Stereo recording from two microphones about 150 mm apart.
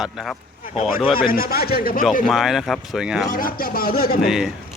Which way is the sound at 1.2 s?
80° left.